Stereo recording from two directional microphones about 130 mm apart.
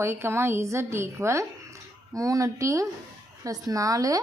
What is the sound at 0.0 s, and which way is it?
Speech, 20° right (ahead or behind).